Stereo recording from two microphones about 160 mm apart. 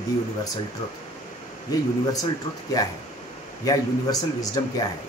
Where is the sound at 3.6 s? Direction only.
25° left (ahead or behind).